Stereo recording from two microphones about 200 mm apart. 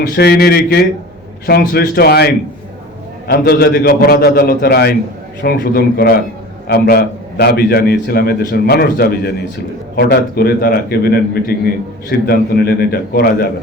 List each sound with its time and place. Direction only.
0.2 s a man's voice: 50° left (ahead or behind)